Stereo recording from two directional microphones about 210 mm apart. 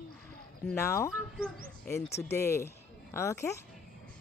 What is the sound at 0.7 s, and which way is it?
A woman's voice, 10° left (ahead or behind).